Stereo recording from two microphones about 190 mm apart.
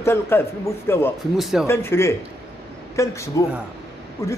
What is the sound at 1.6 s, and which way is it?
A man's voice, 15° left (ahead or behind).